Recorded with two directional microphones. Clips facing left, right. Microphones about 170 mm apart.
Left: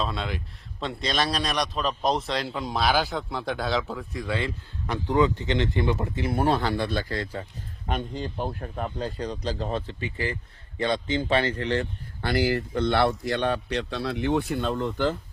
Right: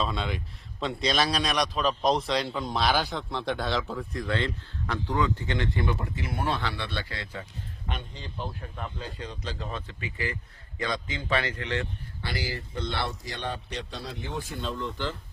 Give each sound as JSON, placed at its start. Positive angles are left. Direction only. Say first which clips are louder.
{"t": 0.0, "sound": "a man's voice", "louder": "even", "side_deg": 0}
{"t": 5.0, "sound": "speech", "louder": "left 6 dB", "side_deg": 20}
{"t": 12.2, "sound": "a man's voice", "louder": "left 10 dB", "side_deg": 55}